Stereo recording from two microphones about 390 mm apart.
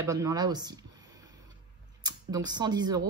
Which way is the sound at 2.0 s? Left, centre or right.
Centre.